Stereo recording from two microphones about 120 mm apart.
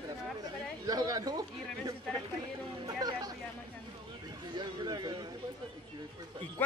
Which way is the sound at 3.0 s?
30° right (ahead or behind).